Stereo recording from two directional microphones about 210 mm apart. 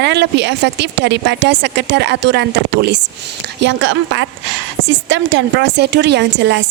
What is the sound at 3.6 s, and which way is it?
A woman's voice, 65° right (ahead or behind).